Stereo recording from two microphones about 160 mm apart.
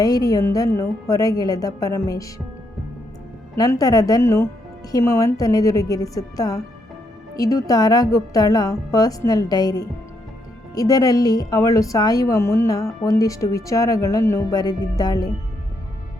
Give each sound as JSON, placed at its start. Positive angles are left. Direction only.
{"t": 0.0, "sound": "a woman's voice", "side_deg": 20}
{"t": 3.5, "sound": "a woman's voice", "side_deg": 20}